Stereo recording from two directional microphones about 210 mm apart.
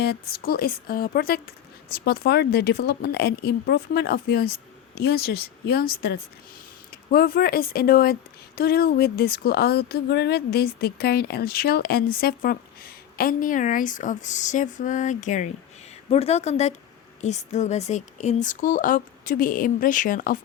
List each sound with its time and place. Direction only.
0.0 s speech: 50° left (ahead or behind)